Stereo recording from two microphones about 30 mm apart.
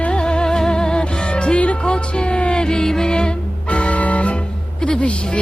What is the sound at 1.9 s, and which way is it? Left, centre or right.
Music, left.